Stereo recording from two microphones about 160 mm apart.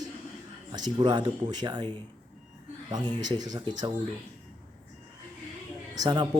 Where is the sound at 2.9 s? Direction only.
25° right (ahead or behind).